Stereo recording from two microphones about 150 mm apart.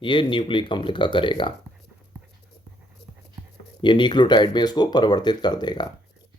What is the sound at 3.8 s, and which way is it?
Speech, 30° left (ahead or behind).